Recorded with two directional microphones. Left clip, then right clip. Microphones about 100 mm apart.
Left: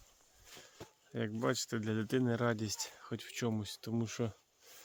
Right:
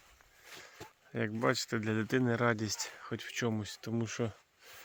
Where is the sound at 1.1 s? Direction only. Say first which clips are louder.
Right 4 dB; 55° right (ahead or behind); by 4.3 s 20° right (ahead or behind).